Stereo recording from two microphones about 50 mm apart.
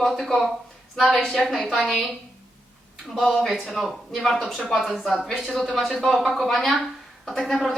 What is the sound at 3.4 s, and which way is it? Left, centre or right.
A woman's voice, centre.